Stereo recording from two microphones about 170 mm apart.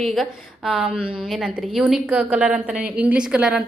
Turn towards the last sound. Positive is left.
turn(degrees=-5)  # may be behind; listen again after turning